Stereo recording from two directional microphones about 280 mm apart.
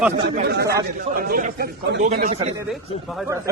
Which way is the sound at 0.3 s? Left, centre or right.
Right.